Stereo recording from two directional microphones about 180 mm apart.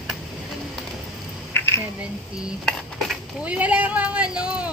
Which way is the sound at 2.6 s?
5° right (ahead or behind).